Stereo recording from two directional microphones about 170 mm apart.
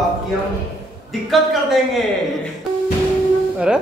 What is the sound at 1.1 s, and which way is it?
A man's voice, centre (ahead or behind).